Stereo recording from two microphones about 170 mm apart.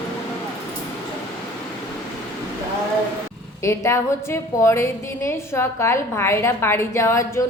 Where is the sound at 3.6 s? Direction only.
15° left (ahead or behind).